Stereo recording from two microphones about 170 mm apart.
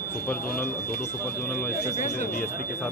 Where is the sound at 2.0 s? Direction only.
50° left (ahead or behind).